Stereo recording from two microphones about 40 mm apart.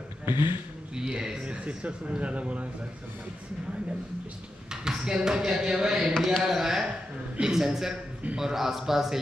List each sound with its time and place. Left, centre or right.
0.2 s a man's voice: right
0.9 s speech: centre; by 2.7 s right
4.8 s speech: centre